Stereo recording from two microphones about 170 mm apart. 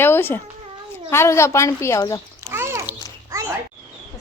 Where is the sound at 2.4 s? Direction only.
15° right (ahead or behind).